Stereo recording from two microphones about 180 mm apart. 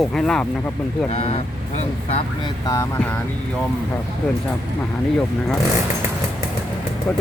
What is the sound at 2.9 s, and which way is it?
Speech, 10° left (ahead or behind).